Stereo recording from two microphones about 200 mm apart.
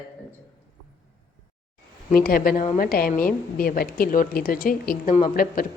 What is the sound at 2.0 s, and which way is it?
A woman's voice, 45° left (ahead or behind).